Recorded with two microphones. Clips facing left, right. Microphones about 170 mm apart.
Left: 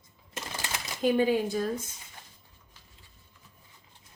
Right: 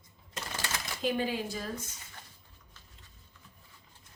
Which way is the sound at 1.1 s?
50° left (ahead or behind).